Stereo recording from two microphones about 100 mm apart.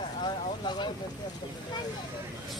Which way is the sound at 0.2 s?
50° left (ahead or behind).